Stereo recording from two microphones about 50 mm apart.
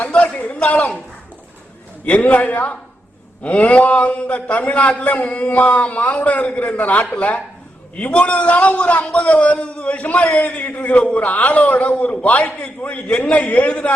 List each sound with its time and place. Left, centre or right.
0.0 s a man's voice: left
2.0 s a man's voice: left